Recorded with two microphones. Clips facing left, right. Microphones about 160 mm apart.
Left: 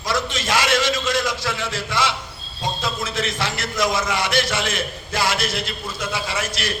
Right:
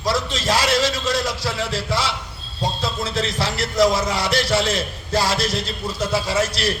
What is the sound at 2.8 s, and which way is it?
A man's voice, 35° right (ahead or behind).